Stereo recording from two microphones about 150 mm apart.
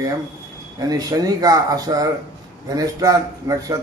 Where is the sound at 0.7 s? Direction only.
25° right (ahead or behind).